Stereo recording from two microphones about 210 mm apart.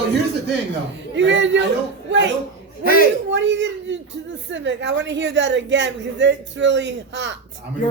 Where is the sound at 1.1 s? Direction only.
60° right (ahead or behind).